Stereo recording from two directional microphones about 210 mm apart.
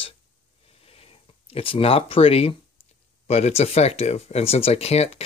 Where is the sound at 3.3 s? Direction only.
30° left (ahead or behind).